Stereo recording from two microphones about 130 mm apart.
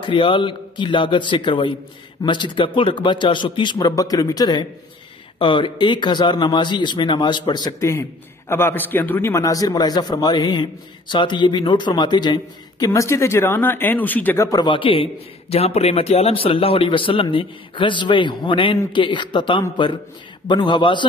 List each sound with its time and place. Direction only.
0.0 s a man's voice: 40° left (ahead or behind); by 9.3 s 15° left (ahead or behind)
9.3 s a man's voice: 25° left (ahead or behind)
14.6 s a man's voice: 40° left (ahead or behind)